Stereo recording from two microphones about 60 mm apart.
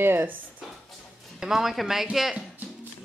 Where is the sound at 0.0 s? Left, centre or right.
Right.